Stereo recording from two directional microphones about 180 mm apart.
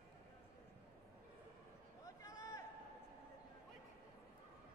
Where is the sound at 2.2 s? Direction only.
20° left (ahead or behind).